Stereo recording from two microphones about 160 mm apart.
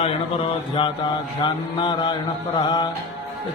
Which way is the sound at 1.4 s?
30° left (ahead or behind).